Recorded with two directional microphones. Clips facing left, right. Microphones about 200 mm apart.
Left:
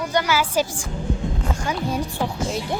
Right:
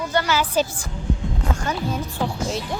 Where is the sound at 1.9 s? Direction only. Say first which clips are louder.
Left 2 dB; 10° left (ahead or behind).